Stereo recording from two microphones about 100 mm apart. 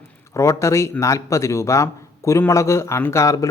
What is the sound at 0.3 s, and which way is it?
Speech, 30° left (ahead or behind).